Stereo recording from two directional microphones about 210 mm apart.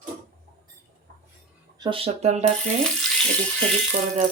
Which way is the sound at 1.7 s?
20° right (ahead or behind).